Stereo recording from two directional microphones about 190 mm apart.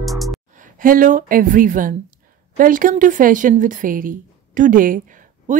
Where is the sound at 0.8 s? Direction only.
45° right (ahead or behind).